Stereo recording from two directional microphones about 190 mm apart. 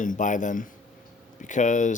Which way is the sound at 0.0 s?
40° left (ahead or behind).